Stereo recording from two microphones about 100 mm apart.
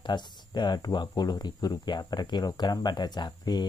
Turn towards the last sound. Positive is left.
turn(degrees=45)  # may be behind; listen again after turning